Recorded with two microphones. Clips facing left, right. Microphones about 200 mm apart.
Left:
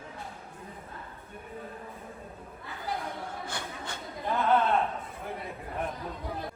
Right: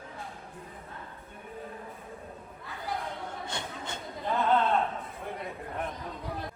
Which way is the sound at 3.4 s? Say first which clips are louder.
Even; 20° right (ahead or behind).